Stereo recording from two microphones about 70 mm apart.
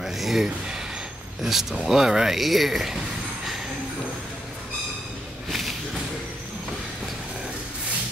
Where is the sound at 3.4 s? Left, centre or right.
Centre.